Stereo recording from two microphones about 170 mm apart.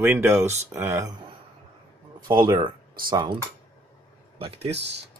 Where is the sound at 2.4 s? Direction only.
25° right (ahead or behind).